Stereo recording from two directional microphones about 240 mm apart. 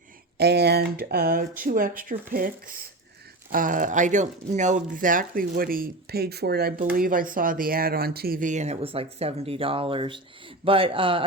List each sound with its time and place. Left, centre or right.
0.3 s speech: right